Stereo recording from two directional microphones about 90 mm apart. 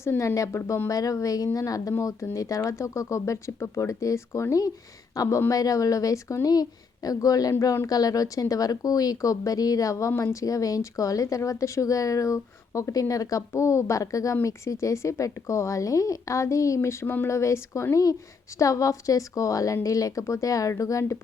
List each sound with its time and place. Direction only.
0.0 s speech: 30° left (ahead or behind)